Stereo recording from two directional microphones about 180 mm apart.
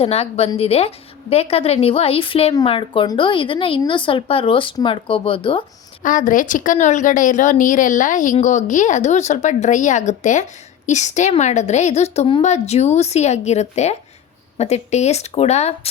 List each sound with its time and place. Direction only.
0.0 s a woman's voice: 35° left (ahead or behind)
6.0 s a woman's voice: 45° left (ahead or behind)